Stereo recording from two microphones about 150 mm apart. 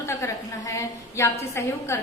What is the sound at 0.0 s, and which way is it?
A woman's voice, 20° left (ahead or behind).